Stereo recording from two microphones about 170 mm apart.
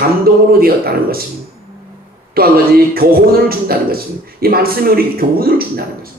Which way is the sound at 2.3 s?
60° right (ahead or behind).